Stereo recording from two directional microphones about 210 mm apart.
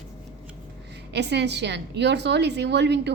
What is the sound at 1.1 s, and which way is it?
A woman's voice, 55° right (ahead or behind).